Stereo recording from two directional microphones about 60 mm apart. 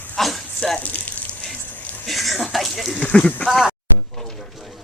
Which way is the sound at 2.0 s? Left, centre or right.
Centre.